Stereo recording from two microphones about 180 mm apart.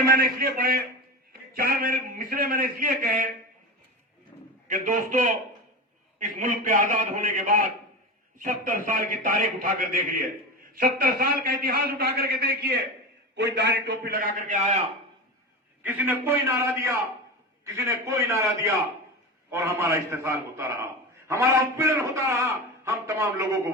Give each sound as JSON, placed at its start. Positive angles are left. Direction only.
{"t": 0.1, "sound": "a man's voice", "side_deg": -60}
{"t": 4.7, "sound": "a man's voice", "side_deg": -45}
{"t": 15.8, "sound": "a man's voice", "side_deg": -10}